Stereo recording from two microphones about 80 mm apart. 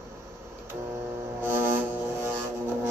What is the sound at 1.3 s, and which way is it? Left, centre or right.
Music, right.